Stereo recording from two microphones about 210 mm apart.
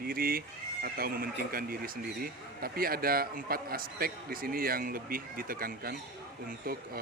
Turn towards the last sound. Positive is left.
turn(degrees=-45)  # may be behind; listen again after turning